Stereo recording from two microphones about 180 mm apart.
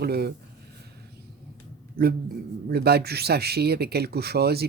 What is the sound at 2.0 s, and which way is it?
Speech, 55° right (ahead or behind).